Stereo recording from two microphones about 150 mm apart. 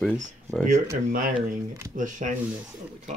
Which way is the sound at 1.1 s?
65° right (ahead or behind).